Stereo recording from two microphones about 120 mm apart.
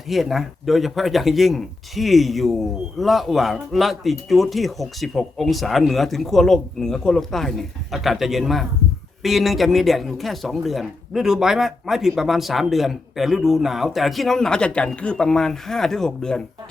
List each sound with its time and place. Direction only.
0.1 s speech: centre (ahead or behind)